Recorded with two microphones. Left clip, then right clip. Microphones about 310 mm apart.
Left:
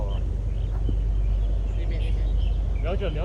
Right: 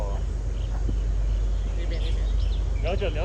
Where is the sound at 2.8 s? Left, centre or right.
Right.